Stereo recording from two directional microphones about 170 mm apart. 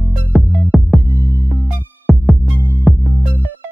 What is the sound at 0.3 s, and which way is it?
Music, centre (ahead or behind).